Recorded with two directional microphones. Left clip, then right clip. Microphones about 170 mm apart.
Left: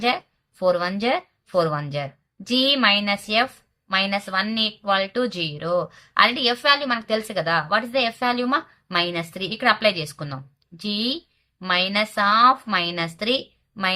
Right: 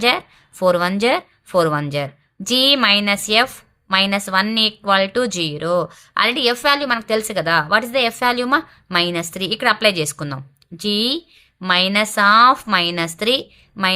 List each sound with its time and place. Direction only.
0.0 s speech: 40° right (ahead or behind)